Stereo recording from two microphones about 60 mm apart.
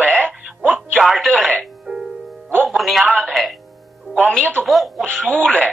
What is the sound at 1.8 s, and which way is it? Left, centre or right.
Music, centre.